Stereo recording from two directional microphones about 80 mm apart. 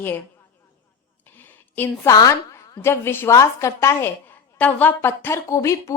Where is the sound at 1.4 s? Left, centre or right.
Left.